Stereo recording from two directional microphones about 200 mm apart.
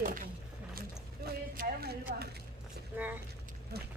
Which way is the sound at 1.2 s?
50° right (ahead or behind).